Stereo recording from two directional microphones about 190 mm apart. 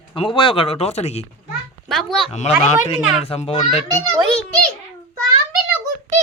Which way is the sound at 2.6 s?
35° left (ahead or behind).